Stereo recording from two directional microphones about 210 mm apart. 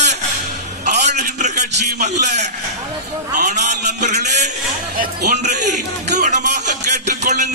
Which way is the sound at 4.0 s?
35° right (ahead or behind).